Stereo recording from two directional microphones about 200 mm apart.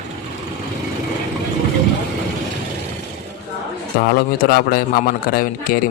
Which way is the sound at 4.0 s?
50° left (ahead or behind).